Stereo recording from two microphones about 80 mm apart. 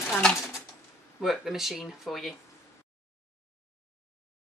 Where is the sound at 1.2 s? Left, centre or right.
Centre.